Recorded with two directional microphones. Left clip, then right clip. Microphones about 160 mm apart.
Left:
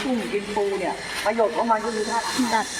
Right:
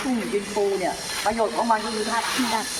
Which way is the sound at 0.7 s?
Centre (ahead or behind).